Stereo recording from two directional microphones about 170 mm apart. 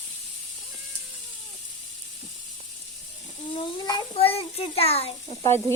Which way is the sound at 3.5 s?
25° left (ahead or behind).